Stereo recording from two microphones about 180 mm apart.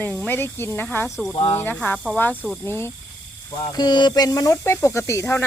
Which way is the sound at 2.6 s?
15° left (ahead or behind).